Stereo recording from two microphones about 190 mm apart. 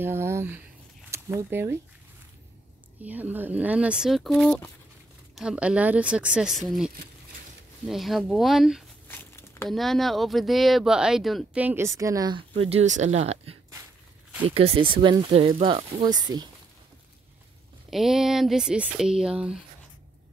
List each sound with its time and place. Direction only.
0.0 s speech: 15° right (ahead or behind)
3.0 s speech: 10° right (ahead or behind)
7.8 s speech: centre (ahead or behind)
9.0 s crumpling: 10° left (ahead or behind)
9.7 s speech: centre (ahead or behind); by 16.4 s 20° right (ahead or behind)
17.8 s speech: centre (ahead or behind)